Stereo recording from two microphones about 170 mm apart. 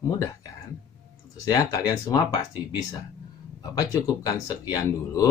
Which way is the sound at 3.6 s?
20° left (ahead or behind).